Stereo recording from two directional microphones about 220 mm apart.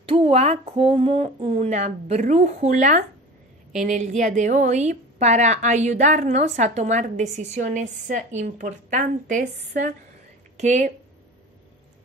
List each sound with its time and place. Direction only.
0.0 s a woman's voice: 25° right (ahead or behind)